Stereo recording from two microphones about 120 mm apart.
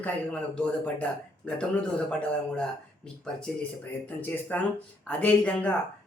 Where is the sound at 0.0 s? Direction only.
10° left (ahead or behind).